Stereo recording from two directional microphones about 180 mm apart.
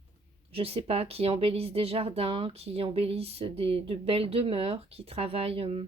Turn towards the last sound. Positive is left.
turn(degrees=-35)  # may be behind; listen again after turning